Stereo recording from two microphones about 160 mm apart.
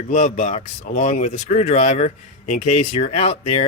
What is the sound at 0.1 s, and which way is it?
Speech, 50° left (ahead or behind).